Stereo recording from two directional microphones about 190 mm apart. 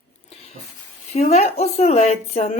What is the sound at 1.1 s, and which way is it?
Speech, 35° left (ahead or behind).